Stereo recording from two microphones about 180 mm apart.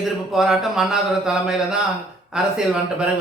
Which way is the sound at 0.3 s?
Centre (ahead or behind).